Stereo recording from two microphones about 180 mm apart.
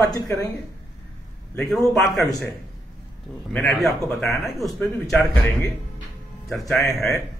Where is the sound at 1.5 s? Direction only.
Centre (ahead or behind).